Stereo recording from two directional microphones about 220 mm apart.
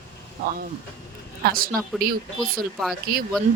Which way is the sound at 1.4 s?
40° right (ahead or behind).